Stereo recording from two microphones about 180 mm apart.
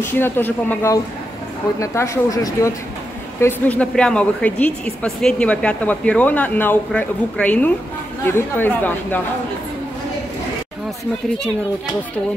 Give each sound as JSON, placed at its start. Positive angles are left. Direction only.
{"t": 0.0, "sound": "a woman's voice", "side_deg": 10}